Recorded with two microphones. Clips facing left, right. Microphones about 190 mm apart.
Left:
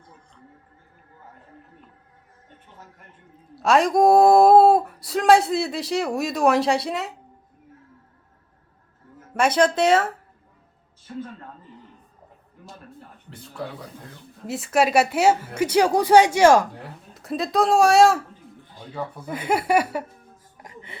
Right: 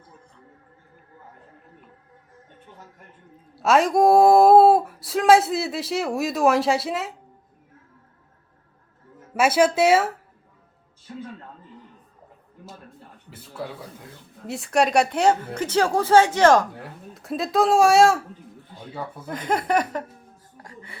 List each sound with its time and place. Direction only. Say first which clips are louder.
3.6 s speech: even; centre (ahead or behind)
9.3 s speech: right 1 dB; 5° right (ahead or behind)
13.3 s a woman's voice: even; 5° right (ahead or behind); by 16.6 s 10° left (ahead or behind)
17.2 s speech: even; centre (ahead or behind)
19.2 s a woman's voice: left 1 dB; 10° left (ahead or behind)
20.6 s a sound: left 1 dB; 20° left (ahead or behind)